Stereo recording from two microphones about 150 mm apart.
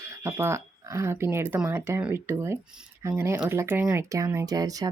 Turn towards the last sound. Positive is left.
turn(degrees=-25)  # may be behind; listen again after turning